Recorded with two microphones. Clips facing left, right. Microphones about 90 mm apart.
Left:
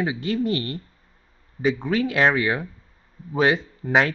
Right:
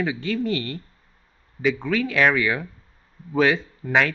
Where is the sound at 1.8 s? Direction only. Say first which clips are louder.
Even; 25° left (ahead or behind).